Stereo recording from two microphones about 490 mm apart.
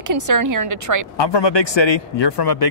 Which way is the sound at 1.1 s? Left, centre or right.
Left.